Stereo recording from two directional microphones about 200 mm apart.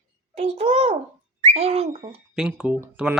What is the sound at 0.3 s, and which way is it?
Speech, 35° right (ahead or behind).